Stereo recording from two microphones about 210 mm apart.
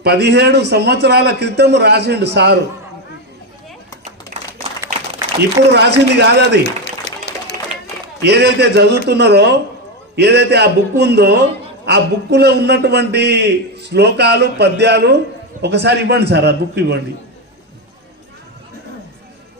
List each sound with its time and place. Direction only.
0.0 s a man's voice: 50° right (ahead or behind)
5.7 s a man's voice: 55° right (ahead or behind)
7.1 s a sound: 50° left (ahead or behind)
8.2 s a man's voice: 50° right (ahead or behind)